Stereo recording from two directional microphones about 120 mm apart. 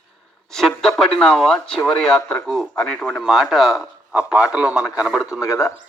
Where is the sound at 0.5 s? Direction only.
5° left (ahead or behind).